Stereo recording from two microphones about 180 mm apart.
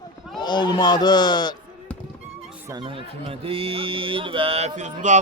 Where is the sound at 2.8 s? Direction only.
30° right (ahead or behind).